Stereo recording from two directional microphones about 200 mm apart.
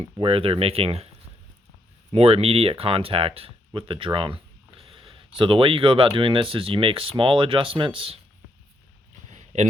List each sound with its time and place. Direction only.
0.0 s speech: 25° right (ahead or behind)
2.1 s speech: 30° right (ahead or behind)
9.3 s a sound: 35° right (ahead or behind)